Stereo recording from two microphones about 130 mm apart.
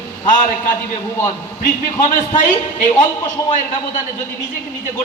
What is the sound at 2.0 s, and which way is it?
A man's voice, 75° left (ahead or behind).